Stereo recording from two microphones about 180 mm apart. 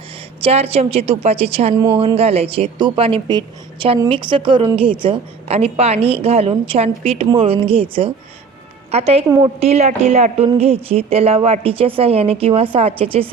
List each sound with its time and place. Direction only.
0.4 s a woman's voice: 35° right (ahead or behind)